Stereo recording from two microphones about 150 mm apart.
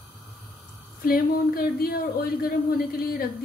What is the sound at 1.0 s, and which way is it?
Speech, 90° left.